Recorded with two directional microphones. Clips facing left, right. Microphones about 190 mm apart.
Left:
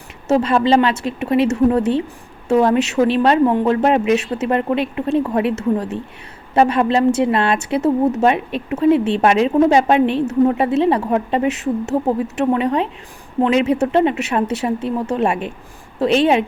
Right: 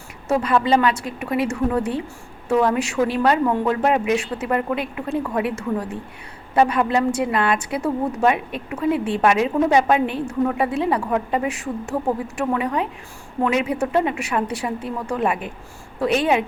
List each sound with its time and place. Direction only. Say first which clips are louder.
0.3 s a woman's voice: left 4 dB; 25° left (ahead or behind)